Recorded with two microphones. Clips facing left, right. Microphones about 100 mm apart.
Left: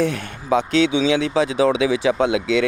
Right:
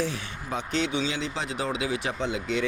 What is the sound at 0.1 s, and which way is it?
Speech, 85° left.